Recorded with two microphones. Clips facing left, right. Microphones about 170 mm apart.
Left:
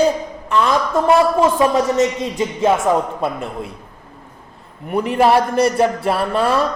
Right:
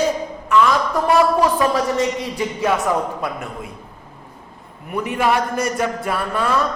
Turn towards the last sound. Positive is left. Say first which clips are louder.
# left 3 dB
turn(degrees=30)  # may be behind; listen again after turning